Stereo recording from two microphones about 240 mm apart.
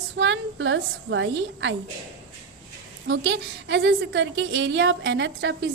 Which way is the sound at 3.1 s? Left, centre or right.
Right.